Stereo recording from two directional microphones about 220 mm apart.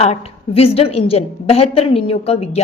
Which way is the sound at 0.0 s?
30° left (ahead or behind).